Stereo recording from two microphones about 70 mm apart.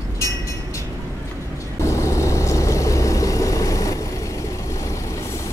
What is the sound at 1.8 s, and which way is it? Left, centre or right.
Vehicle, left.